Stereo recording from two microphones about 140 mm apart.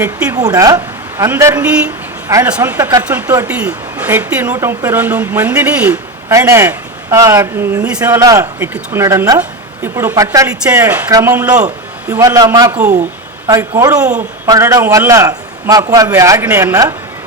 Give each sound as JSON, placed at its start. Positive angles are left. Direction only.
{"t": 0.3, "sound": "a man's voice", "side_deg": -25}
{"t": 3.0, "sound": "speech", "side_deg": -10}
{"t": 6.2, "sound": "speech", "side_deg": -20}
{"t": 7.9, "sound": "speech", "side_deg": -10}
{"t": 8.2, "sound": "a man's voice", "side_deg": -20}